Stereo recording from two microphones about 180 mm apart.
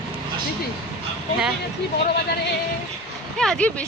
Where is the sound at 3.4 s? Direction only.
5° left (ahead or behind).